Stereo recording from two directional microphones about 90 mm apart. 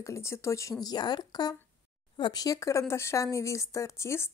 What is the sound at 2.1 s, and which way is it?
Speech, 60° left (ahead or behind).